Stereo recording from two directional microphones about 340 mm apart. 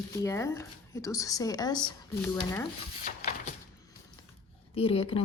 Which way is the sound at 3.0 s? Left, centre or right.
Left.